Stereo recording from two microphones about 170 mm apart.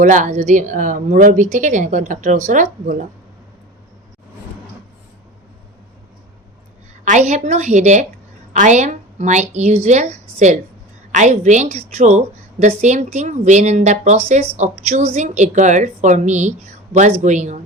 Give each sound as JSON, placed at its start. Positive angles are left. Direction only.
{"t": 0.0, "sound": "a woman's voice", "side_deg": -45}
{"t": 7.0, "sound": "a woman's voice", "side_deg": -45}